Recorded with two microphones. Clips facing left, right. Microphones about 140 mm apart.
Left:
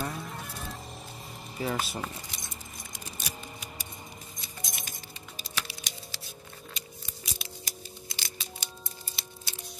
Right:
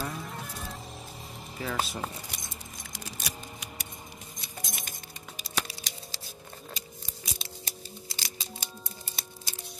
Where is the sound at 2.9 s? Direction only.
90° right.